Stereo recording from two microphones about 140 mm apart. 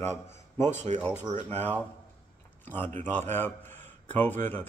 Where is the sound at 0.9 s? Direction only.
55° right (ahead or behind).